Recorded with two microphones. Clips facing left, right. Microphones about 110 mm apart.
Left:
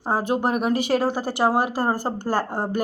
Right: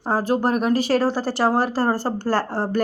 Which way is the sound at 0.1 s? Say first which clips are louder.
Right 2 dB; 15° left (ahead or behind).